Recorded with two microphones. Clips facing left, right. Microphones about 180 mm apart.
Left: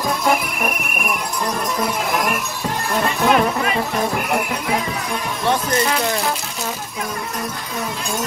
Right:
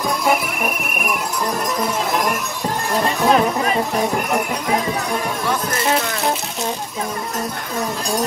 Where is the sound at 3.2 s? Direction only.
35° right (ahead or behind).